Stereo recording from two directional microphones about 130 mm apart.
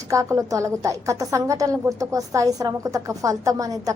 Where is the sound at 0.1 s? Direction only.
25° right (ahead or behind).